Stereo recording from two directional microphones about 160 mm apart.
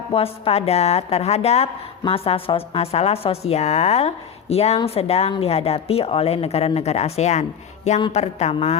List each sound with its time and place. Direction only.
0.1 s a woman's voice: 35° left (ahead or behind)